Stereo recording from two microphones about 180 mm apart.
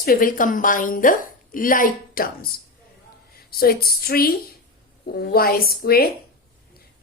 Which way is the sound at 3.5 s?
55° left (ahead or behind).